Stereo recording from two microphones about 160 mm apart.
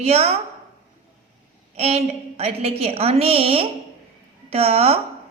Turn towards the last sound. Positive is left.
turn(degrees=-40)  # may be behind; listen again after turning